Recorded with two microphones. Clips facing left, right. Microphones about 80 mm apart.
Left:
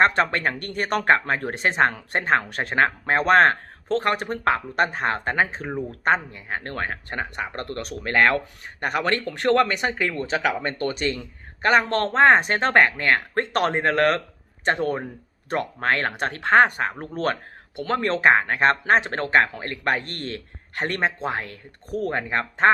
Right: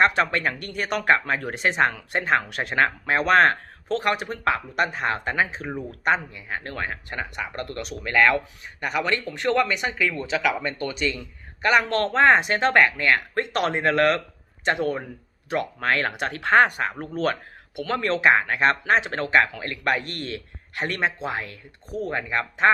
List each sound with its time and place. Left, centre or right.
0.0 s a man's voice: left